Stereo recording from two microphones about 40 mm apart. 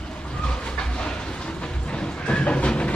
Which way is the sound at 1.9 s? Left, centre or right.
Left.